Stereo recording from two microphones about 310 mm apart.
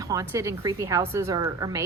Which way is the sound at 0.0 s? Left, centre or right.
Centre.